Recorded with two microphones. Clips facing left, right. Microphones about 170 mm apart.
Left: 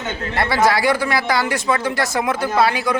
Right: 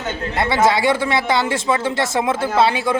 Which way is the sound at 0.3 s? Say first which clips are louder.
Right 1 dB; 20° right (ahead or behind).